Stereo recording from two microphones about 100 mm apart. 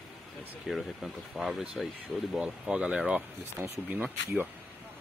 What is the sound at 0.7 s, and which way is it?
Speech, centre (ahead or behind).